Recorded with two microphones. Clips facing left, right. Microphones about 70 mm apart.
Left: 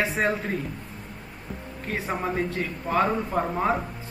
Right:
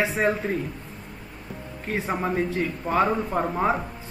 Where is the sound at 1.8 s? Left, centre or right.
Centre.